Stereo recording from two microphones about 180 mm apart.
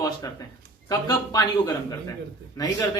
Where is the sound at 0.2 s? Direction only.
20° left (ahead or behind).